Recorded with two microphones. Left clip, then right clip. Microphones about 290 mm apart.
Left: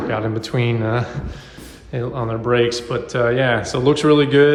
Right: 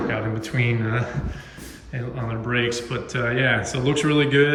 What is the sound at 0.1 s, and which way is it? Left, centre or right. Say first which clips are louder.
Speech: left 5 dB; centre.